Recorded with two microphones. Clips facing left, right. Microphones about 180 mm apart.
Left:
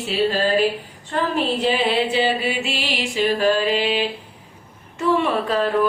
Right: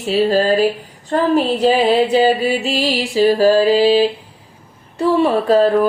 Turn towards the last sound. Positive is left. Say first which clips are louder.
# right 7 dB
turn(degrees=-40)  # may be behind; listen again after turning